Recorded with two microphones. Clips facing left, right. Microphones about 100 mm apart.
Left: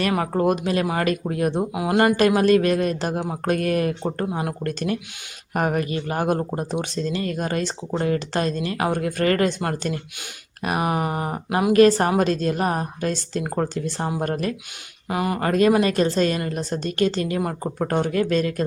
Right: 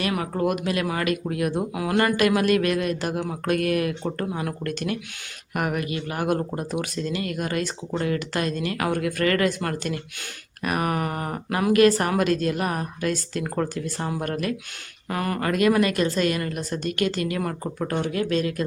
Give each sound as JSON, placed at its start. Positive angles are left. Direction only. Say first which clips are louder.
{"t": 0.0, "sound": "speech", "louder": "left 4 dB", "side_deg": 35}
{"t": 11.7, "sound": "speech", "louder": "left 3 dB", "side_deg": 30}
{"t": 15.1, "sound": "speech", "louder": "left 3 dB", "side_deg": 15}
{"t": 15.4, "sound": "speech", "louder": "left 2 dB", "side_deg": 30}
{"t": 17.7, "sound": "speech", "louder": "left 5 dB", "side_deg": 40}